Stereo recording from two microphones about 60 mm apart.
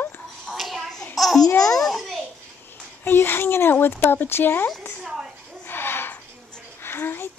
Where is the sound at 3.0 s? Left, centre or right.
Left.